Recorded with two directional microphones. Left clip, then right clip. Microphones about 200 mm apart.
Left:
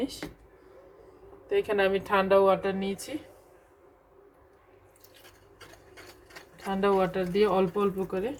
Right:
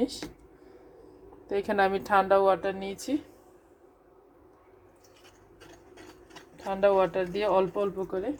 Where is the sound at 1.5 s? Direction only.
35° right (ahead or behind).